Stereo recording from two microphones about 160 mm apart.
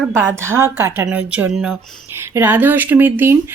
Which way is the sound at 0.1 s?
15° right (ahead or behind).